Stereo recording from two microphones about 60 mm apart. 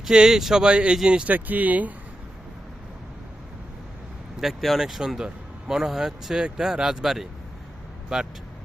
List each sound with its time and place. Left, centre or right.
0.0 s speech: centre
1.3 s speech: right
4.4 s speech: centre